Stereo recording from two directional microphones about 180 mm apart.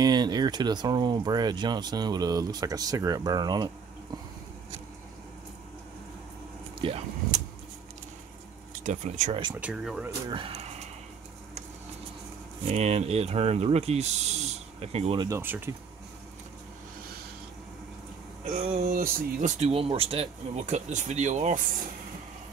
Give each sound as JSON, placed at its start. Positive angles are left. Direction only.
{"t": 0.0, "sound": "speech", "side_deg": -20}
{"t": 6.8, "sound": "speech", "side_deg": -30}
{"t": 8.8, "sound": "speech", "side_deg": -45}
{"t": 9.3, "sound": "speech", "side_deg": -25}
{"t": 9.6, "sound": "speech", "side_deg": -5}
{"t": 10.3, "sound": "a sound", "side_deg": -30}
{"t": 12.7, "sound": "speech", "side_deg": -35}
{"t": 15.2, "sound": "speech", "side_deg": -15}
{"t": 18.6, "sound": "speech", "side_deg": -45}
{"t": 19.6, "sound": "speech", "side_deg": -30}